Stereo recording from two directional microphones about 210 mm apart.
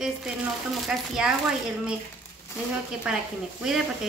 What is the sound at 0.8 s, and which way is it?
Speech, 5° right (ahead or behind).